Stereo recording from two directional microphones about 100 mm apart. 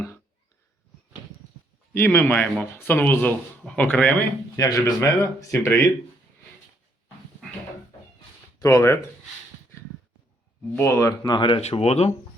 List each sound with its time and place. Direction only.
2.0 s speech: 20° left (ahead or behind)
4.5 s speech: 35° left (ahead or behind)
8.5 s speech: 30° left (ahead or behind)
10.8 s speech: 25° left (ahead or behind)
11.2 s speech: 50° left (ahead or behind)
11.8 s speech: 90° left